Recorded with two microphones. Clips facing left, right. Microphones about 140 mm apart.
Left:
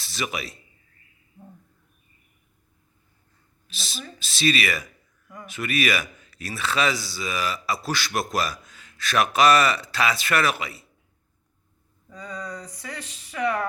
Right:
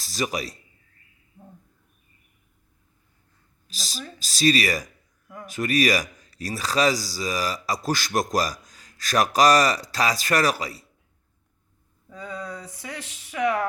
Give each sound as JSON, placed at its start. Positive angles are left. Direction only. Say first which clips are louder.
{"t": 0.0, "sound": "a man's voice", "louder": "right 3 dB", "side_deg": -40}
{"t": 3.7, "sound": "speech", "louder": "right 1 dB", "side_deg": -40}
{"t": 12.0, "sound": "speech", "louder": "right 1 dB", "side_deg": -5}